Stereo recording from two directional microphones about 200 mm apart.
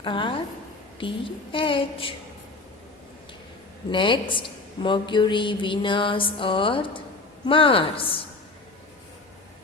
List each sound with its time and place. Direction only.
0.0 s a woman's voice: 25° left (ahead or behind)
3.9 s a woman's voice: 25° left (ahead or behind)